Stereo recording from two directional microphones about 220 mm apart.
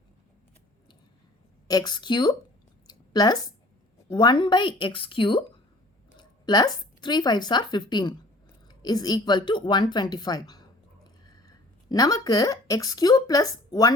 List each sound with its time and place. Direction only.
1.6 s a woman's voice: 15° left (ahead or behind)
2.8 s a sound: 20° left (ahead or behind)
4.1 s a woman's voice: 20° left (ahead or behind)